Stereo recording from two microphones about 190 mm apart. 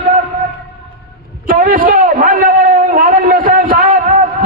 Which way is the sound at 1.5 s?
45° right (ahead or behind).